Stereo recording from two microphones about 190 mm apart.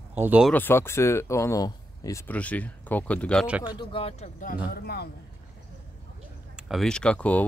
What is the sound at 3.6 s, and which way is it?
Speech, 25° left (ahead or behind).